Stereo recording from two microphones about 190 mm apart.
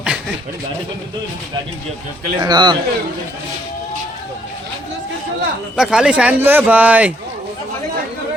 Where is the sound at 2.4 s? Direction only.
20° right (ahead or behind).